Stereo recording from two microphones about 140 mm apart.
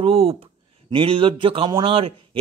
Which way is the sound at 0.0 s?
45° right (ahead or behind).